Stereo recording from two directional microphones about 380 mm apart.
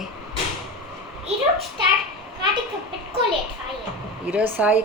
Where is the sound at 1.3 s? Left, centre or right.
Centre.